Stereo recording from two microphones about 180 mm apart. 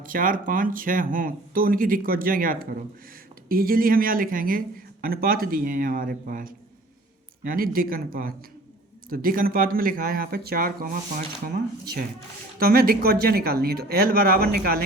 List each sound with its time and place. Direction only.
0.0 s speech: 50° right (ahead or behind)